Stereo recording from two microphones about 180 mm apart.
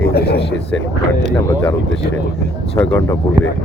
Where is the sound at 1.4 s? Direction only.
15° left (ahead or behind).